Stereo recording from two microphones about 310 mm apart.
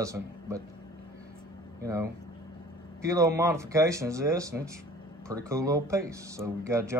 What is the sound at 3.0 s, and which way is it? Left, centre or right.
Speech, centre.